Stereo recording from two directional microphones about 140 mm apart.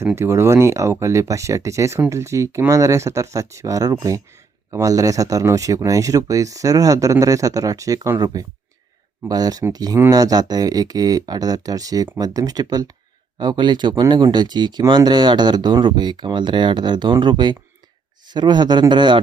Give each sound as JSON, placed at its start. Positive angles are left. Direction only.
{"t": 0.2, "sound": "speech", "side_deg": -20}